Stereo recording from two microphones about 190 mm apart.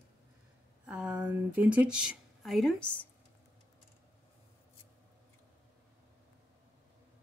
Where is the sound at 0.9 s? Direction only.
5° right (ahead or behind).